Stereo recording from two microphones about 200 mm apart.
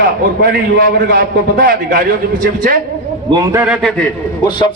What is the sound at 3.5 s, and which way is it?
Speech, 10° right (ahead or behind).